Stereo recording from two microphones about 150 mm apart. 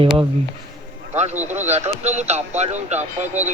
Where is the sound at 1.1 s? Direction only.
50° right (ahead or behind).